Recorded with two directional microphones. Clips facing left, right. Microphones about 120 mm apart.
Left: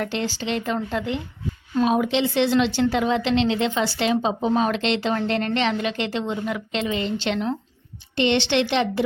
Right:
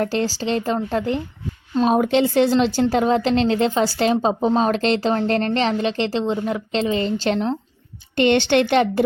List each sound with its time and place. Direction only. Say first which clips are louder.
0.0 s a woman's voice: right 5 dB; 40° right (ahead or behind)
8.1 s a woman's voice: right 4 dB; 50° right (ahead or behind)